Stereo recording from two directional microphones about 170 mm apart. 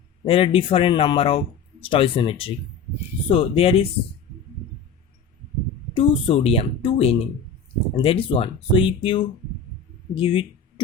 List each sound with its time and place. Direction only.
0.3 s speech: 35° left (ahead or behind)
5.9 s speech: 35° left (ahead or behind)